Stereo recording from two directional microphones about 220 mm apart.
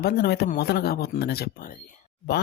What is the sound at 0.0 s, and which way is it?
Speech, 45° left (ahead or behind).